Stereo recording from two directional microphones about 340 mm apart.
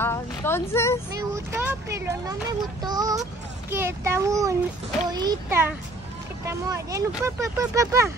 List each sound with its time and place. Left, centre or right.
0.0 s a woman's voice: centre
1.1 s speech: centre